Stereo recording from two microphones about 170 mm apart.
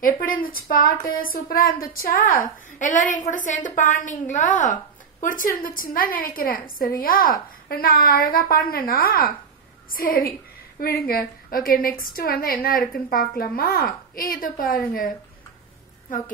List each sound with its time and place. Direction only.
0.0 s speech: 55° left (ahead or behind)